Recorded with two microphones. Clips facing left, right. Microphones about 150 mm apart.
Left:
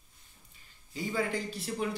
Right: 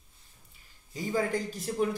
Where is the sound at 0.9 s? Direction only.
45° right (ahead or behind).